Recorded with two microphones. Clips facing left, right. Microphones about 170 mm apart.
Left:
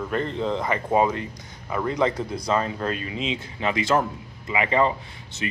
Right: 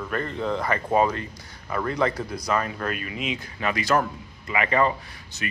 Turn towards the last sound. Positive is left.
turn(degrees=25)  # may be behind; listen again after turning